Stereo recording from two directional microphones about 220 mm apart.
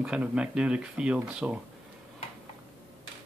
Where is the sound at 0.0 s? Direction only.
5° right (ahead or behind).